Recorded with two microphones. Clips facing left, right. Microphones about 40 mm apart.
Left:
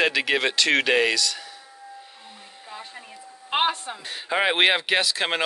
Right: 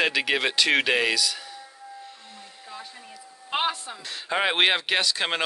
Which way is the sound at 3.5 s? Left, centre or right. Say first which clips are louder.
Left 3 dB; left.